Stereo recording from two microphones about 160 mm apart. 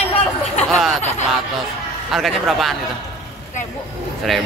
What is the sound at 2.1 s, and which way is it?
Speech, centre (ahead or behind).